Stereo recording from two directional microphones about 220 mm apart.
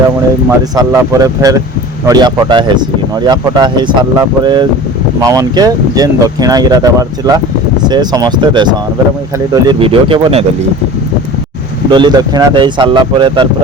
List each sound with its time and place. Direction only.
0.8 s speech: 15° right (ahead or behind)
11.9 s speech: 20° right (ahead or behind)